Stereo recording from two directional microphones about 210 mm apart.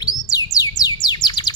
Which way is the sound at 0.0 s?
20° left (ahead or behind).